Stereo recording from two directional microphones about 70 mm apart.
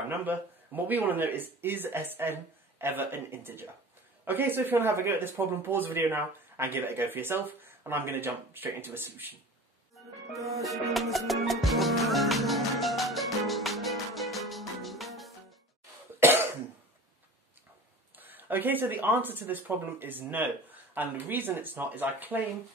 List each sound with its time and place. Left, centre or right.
0.2 s speech: right
10.6 s music: centre
16.2 s cough: right
18.1 s speech: right